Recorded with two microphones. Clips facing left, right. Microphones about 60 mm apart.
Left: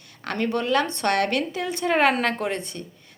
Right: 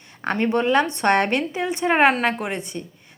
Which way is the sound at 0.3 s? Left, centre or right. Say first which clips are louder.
Right 4 dB; right.